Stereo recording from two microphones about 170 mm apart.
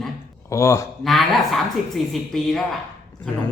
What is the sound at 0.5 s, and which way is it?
Speech, 15° left (ahead or behind).